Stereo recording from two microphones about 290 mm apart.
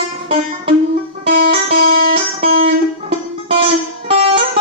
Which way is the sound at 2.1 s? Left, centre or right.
Centre.